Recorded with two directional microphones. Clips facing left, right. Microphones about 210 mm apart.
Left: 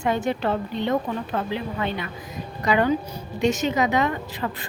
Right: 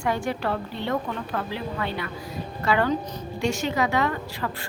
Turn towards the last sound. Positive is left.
turn(degrees=20)  # may be behind; listen again after turning